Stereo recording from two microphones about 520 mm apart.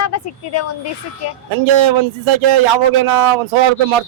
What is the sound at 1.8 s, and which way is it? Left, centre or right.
A man's voice, right.